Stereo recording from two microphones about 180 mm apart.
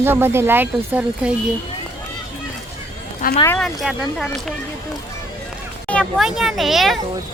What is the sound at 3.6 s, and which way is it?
Speech, centre (ahead or behind).